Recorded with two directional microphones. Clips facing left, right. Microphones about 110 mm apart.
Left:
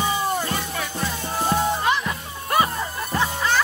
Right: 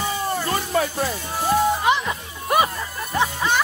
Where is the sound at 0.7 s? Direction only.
40° right (ahead or behind).